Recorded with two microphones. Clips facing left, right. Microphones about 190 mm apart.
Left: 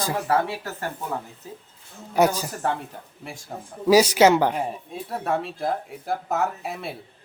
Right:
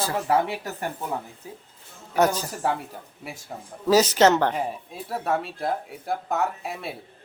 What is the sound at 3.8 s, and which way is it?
Speech, 10° left (ahead or behind).